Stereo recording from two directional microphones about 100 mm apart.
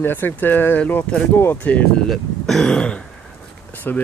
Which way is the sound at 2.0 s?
Centre (ahead or behind).